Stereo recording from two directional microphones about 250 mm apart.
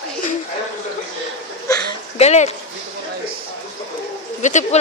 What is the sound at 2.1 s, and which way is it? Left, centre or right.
Speech, left.